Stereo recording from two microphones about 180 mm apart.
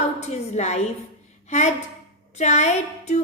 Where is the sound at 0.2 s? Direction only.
40° left (ahead or behind).